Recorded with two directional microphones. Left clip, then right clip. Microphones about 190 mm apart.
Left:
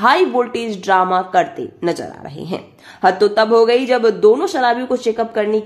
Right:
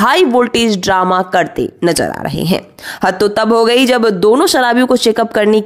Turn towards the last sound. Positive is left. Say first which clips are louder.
# right 6 dB
turn(degrees=-45)  # may be behind; listen again after turning